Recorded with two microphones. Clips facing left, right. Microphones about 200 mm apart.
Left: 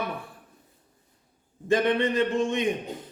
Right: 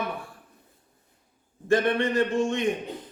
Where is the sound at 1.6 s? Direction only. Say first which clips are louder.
Even; 20° left (ahead or behind).